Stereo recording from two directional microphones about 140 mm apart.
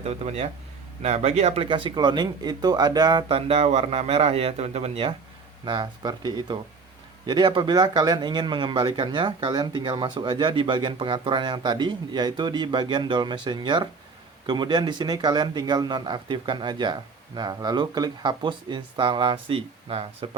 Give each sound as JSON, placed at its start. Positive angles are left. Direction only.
{"t": 0.0, "sound": "speech", "side_deg": -50}
{"t": 1.7, "sound": "speech", "side_deg": -35}
{"t": 5.6, "sound": "speech", "side_deg": -35}